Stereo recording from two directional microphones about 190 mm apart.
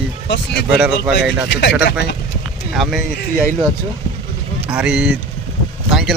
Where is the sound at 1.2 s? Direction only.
65° left (ahead or behind).